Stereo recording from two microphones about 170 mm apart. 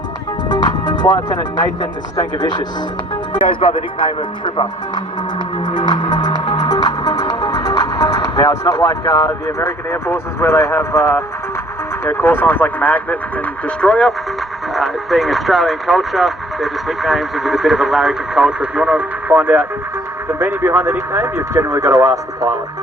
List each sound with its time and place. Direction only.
0.5 s speech: 20° left (ahead or behind)
5.6 s music: 25° left (ahead or behind)
12.0 s speech: 10° left (ahead or behind); by 22.5 s 15° right (ahead or behind)